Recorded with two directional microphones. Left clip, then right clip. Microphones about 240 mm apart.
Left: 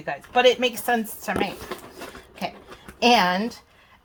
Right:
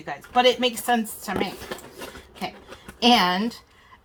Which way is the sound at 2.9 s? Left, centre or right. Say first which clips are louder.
Even; left.